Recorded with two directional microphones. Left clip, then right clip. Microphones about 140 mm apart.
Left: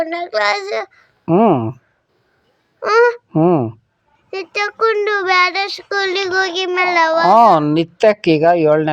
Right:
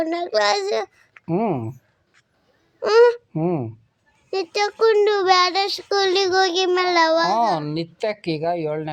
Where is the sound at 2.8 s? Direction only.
20° right (ahead or behind).